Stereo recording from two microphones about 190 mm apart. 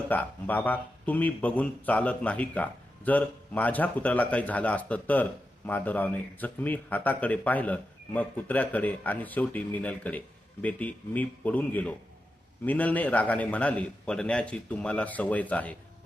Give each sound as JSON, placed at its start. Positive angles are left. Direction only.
{"t": 0.1, "sound": "a man's voice", "side_deg": 10}